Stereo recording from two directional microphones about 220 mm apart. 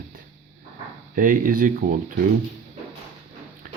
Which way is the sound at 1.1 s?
40° right (ahead or behind).